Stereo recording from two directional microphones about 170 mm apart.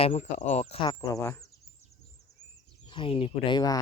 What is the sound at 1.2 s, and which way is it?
Speech, 15° left (ahead or behind).